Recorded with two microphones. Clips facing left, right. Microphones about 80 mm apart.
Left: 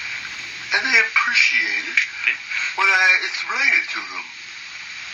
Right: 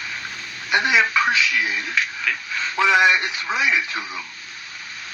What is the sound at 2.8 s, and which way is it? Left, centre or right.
Speech, right.